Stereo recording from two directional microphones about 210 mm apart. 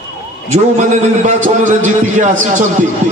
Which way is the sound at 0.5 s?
35° right (ahead or behind).